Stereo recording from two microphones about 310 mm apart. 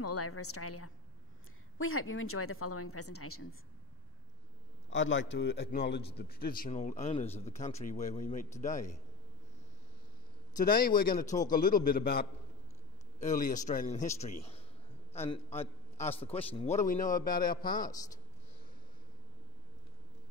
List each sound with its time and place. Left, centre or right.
0.0 s a woman's voice: left
4.8 s a man's voice: left
10.5 s a man's voice: left